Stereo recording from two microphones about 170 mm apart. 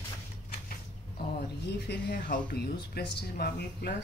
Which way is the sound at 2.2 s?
60° left (ahead or behind).